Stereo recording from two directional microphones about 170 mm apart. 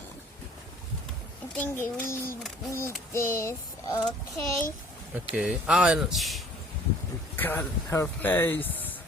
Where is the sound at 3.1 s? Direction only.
15° left (ahead or behind).